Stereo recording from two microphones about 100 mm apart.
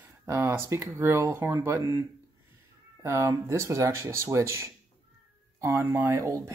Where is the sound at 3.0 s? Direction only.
30° right (ahead or behind).